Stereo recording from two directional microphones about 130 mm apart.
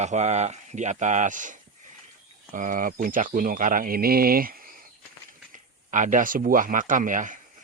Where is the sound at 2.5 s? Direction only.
90° right.